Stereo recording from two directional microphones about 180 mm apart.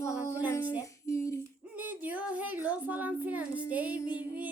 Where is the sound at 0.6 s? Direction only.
10° right (ahead or behind).